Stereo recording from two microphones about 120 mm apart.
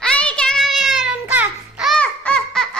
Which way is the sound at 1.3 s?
15° right (ahead or behind).